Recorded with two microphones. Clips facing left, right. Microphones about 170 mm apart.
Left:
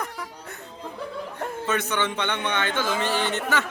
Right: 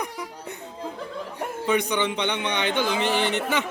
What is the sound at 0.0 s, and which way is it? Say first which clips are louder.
Music: right 2 dB; 15° right (ahead or behind).